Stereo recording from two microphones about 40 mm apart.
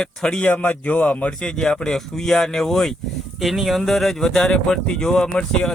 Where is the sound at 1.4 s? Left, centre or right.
Centre.